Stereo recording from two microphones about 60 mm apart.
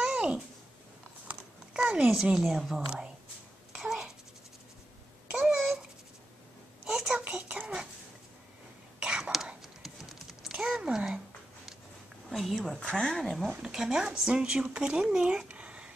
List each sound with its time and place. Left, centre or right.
0.0 s babbling: centre
1.7 s a woman's voice: centre
5.5 s a sound: centre
6.9 s a sound: centre
7.2 s a sound: right
9.2 s whispering: centre
9.6 s typing: centre
12.3 s a woman's voice: centre
13.2 s a woman's voice: centre